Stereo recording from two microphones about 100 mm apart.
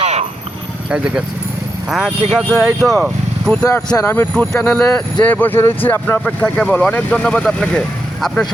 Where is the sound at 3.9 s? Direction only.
25° left (ahead or behind).